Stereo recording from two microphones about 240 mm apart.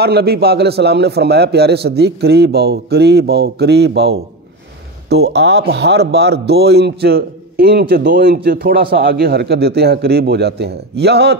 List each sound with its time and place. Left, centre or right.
0.0 s a man's voice: right